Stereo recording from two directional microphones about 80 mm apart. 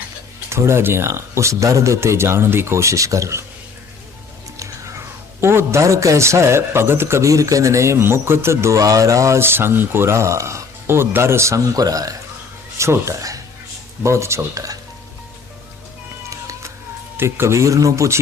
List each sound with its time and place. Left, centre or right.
0.5 s a man's voice: right
4.5 s a man's voice: right
12.7 s a man's voice: right
16.3 s cat: right
17.2 s a man's voice: right